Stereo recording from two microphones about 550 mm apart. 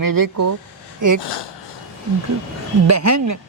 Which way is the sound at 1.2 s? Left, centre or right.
Left.